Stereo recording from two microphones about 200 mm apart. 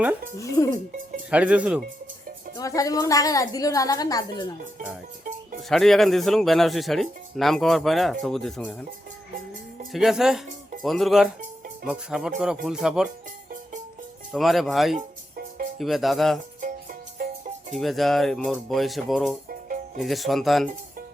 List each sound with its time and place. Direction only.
0.3 s a woman's voice: 15° left (ahead or behind)
1.3 s speech: 5° right (ahead or behind)
2.6 s a woman's voice: 15° left (ahead or behind)
5.6 s speech: centre (ahead or behind)
9.9 s speech: centre (ahead or behind)
14.3 s speech: centre (ahead or behind)
14.9 s music: 45° right (ahead or behind)
15.8 s speech: centre (ahead or behind)
17.7 s speech: centre (ahead or behind)
19.5 s music: 40° right (ahead or behind)
20.0 s speech: centre (ahead or behind)